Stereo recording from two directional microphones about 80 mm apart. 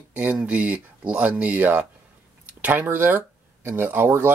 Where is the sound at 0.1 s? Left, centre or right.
Right.